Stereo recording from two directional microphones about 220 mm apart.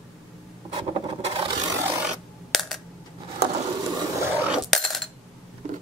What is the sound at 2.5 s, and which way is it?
Coin, centre (ahead or behind).